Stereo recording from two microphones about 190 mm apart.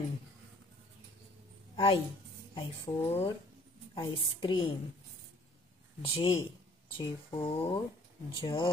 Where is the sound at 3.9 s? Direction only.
25° left (ahead or behind).